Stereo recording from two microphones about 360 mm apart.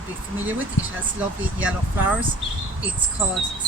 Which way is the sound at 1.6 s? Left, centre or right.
Centre.